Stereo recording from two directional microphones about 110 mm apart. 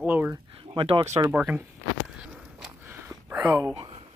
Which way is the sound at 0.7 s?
50° right (ahead or behind).